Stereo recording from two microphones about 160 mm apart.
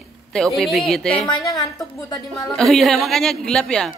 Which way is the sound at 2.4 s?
Centre (ahead or behind).